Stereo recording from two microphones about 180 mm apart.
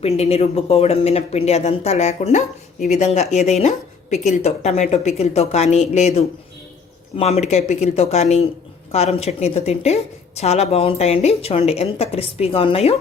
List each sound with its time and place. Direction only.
0.0 s a woman's voice: 35° left (ahead or behind)